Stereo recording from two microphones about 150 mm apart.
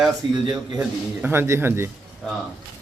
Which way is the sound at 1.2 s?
15° right (ahead or behind).